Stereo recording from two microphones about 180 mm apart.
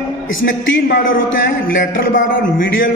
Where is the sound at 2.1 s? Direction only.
50° left (ahead or behind).